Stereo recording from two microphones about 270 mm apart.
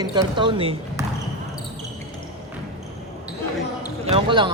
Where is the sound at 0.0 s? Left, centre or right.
Centre.